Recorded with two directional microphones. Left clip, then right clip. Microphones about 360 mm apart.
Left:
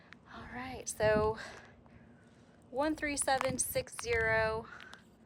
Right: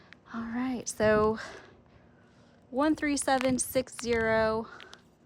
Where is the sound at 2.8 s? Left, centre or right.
Right.